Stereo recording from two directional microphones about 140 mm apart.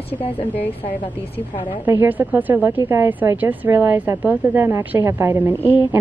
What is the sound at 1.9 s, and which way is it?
Speech, 15° right (ahead or behind).